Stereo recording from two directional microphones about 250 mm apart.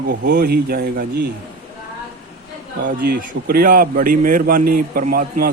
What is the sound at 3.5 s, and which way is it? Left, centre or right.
Speech, right.